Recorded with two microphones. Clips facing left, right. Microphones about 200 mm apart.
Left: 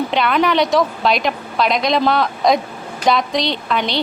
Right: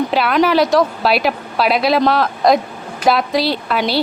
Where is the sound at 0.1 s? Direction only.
5° right (ahead or behind).